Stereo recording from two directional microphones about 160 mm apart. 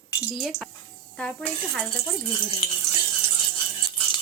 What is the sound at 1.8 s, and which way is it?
Speech, 30° left (ahead or behind).